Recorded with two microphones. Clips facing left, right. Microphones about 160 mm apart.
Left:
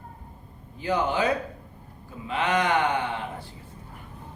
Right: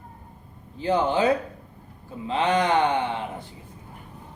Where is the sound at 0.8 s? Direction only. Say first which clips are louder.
Right 3 dB; 30° right (ahead or behind).